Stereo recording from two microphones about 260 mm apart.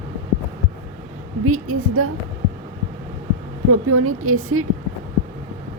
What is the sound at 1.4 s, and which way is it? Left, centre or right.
Speech, right.